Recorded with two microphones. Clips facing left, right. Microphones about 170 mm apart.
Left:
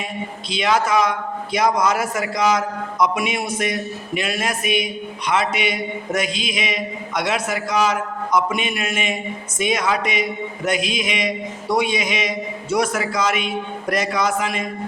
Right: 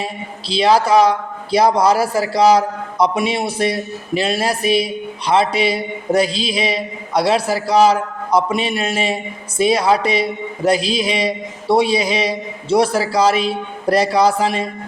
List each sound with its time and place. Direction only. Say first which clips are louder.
0.5 s a man's voice: right 6 dB; 30° right (ahead or behind)